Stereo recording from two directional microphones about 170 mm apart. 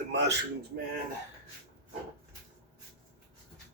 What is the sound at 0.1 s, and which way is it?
Speech, 90° right.